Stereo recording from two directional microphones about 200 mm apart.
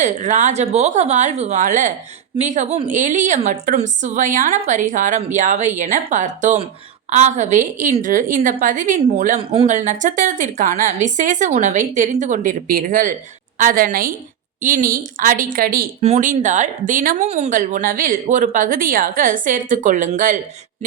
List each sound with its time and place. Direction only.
0.0 s a woman's voice: 35° right (ahead or behind)
16.0 s speech: 35° right (ahead or behind)